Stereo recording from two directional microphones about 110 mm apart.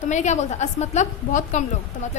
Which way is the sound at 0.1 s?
90° left.